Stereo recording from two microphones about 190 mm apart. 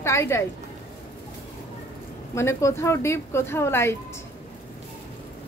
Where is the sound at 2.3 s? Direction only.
15° left (ahead or behind).